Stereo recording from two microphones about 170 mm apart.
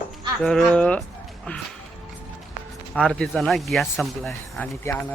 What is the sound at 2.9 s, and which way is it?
Speech, 5° left (ahead or behind).